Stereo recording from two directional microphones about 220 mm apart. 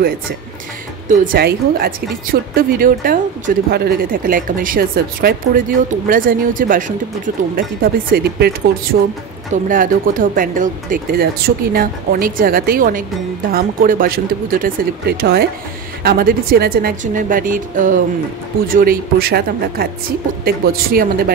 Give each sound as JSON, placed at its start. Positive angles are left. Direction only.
{"t": 1.0, "sound": "speech", "side_deg": -40}